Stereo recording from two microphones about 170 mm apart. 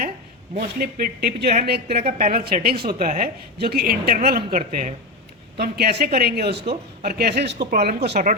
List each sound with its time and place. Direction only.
0.5 s speech: 60° right (ahead or behind)
4.5 s a woman's voice: 50° right (ahead or behind)
5.5 s speech: 65° right (ahead or behind); by 7.7 s 85° right
7.7 s speech: 65° right (ahead or behind)